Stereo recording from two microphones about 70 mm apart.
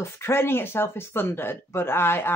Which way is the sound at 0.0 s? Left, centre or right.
Left.